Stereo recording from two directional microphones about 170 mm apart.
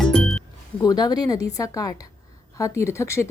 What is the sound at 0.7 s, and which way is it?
A woman's voice, 25° left (ahead or behind).